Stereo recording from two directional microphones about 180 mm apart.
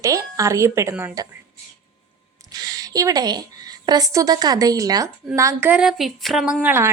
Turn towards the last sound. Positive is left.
turn(degrees=-10)  # may be behind; listen again after turning